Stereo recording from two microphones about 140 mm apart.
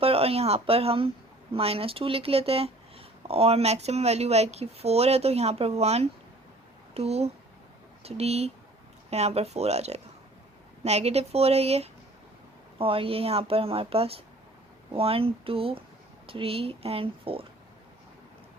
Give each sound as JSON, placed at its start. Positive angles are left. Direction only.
{"t": 0.0, "sound": "speech", "side_deg": -45}